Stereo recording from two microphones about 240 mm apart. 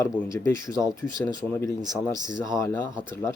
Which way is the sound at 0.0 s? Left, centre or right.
Centre.